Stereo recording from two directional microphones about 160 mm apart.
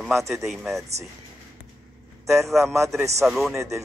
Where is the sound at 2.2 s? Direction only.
20° right (ahead or behind).